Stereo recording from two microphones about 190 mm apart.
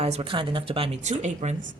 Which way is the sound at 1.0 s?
40° right (ahead or behind).